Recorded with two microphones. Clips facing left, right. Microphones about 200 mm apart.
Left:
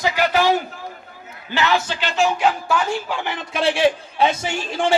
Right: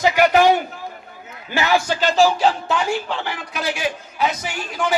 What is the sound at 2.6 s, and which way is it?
Speech, 20° right (ahead or behind).